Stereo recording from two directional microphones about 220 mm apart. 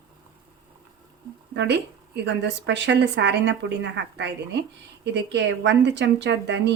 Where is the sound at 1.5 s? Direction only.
50° right (ahead or behind).